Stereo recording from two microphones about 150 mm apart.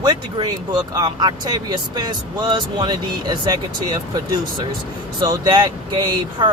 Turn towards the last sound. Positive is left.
turn(degrees=-30)  # may be behind; listen again after turning